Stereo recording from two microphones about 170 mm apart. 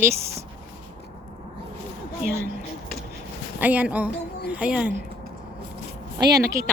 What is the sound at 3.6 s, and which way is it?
A woman's voice, 10° right (ahead or behind).